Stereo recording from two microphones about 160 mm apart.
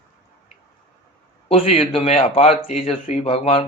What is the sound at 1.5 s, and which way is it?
Speech, 35° left (ahead or behind).